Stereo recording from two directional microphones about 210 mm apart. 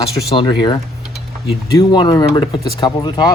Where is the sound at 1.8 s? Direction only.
20° left (ahead or behind).